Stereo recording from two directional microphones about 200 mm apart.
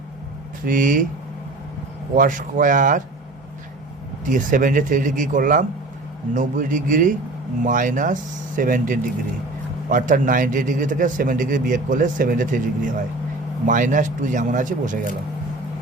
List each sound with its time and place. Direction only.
0.6 s speech: 40° right (ahead or behind)
2.1 s a man's voice: 40° right (ahead or behind)
4.3 s a man's voice: 40° right (ahead or behind)